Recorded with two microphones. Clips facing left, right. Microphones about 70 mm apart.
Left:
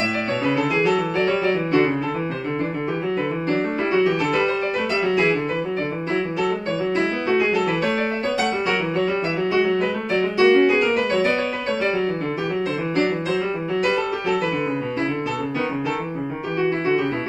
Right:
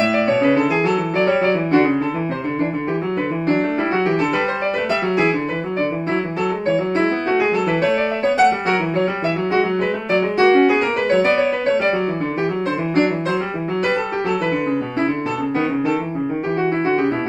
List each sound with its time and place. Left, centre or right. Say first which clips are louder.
0.3 s music: right 3 dB; right
3.5 s music: even; right
7.3 s music: even; right
9.5 s music: right 1 dB; right